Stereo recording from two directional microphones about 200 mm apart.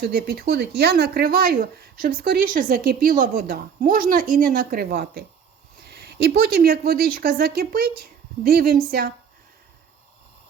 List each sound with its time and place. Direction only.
0.0 s speech: 50° right (ahead or behind)